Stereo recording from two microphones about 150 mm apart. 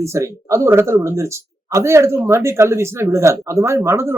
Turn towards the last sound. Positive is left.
turn(degrees=-15)  # may be behind; listen again after turning